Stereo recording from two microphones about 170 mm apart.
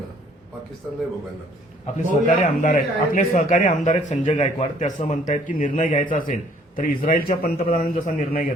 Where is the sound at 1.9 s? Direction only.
45° left (ahead or behind).